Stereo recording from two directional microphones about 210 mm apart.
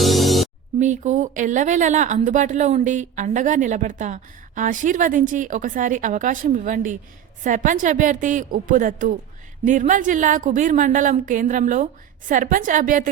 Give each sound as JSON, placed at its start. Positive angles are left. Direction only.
{"t": 0.0, "sound": "music", "side_deg": 0}
{"t": 0.8, "sound": "speech", "side_deg": -35}